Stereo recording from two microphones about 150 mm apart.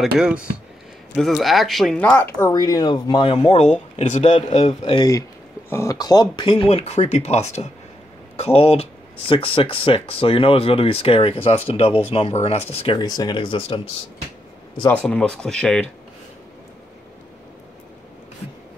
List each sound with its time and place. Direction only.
0.2 s speech: 10° right (ahead or behind); by 5.0 s 40° left (ahead or behind)
5.7 s speech: 20° left (ahead or behind); by 13.0 s 35° left (ahead or behind)
13.0 s speech: 25° left (ahead or behind)
14.9 s speech: 10° left (ahead or behind)